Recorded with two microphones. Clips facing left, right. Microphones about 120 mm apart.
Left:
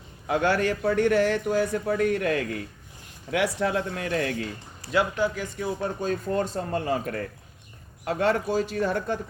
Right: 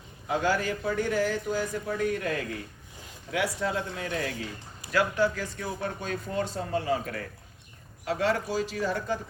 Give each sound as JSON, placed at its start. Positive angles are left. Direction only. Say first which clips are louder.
{"t": 0.3, "sound": "a man's voice", "louder": "left 4 dB", "side_deg": 65}
{"t": 4.9, "sound": "speech", "louder": "left 1 dB", "side_deg": 20}
{"t": 5.8, "sound": "a man's voice", "louder": "left 5 dB", "side_deg": 40}